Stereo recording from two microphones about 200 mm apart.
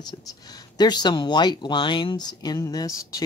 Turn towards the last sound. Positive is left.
turn(degrees=15)  # may be behind; listen again after turning